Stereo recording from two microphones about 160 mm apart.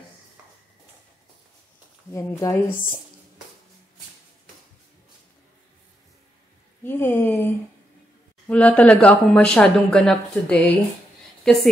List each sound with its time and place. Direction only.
2.0 s speech: 15° left (ahead or behind)
6.8 s a woman's voice: 15° left (ahead or behind)